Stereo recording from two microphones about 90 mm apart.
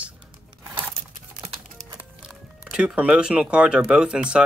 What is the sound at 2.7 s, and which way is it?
Speech, 15° right (ahead or behind).